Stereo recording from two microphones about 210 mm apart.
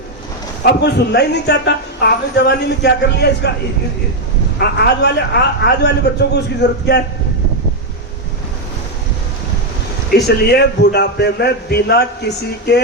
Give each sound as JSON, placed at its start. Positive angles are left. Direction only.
{"t": 0.6, "sound": "speech", "side_deg": 50}
{"t": 4.6, "sound": "speech", "side_deg": 50}
{"t": 10.2, "sound": "speech", "side_deg": 50}